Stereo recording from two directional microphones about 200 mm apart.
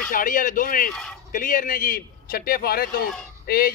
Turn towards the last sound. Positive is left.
turn(degrees=50)  # may be behind; listen again after turning